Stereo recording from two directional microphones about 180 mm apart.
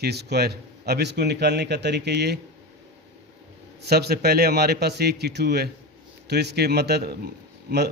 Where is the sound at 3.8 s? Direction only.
60° right (ahead or behind).